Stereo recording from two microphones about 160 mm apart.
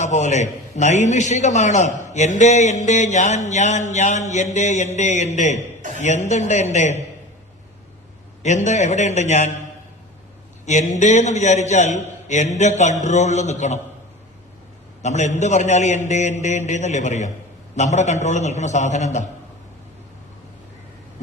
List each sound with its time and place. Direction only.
0.0 s a man's voice: 45° left (ahead or behind)
8.4 s a man's voice: 45° left (ahead or behind)
10.7 s a man's voice: 50° left (ahead or behind)
15.0 s a man's voice: 45° left (ahead or behind)